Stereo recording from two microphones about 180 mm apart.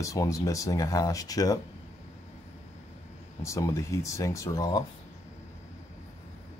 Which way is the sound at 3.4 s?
15° left (ahead or behind).